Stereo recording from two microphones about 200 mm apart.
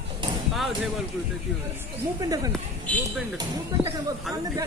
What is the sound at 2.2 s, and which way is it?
Speech, 20° right (ahead or behind).